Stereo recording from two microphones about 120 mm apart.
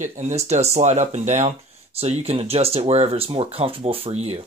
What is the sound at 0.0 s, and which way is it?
Speech, 80° right.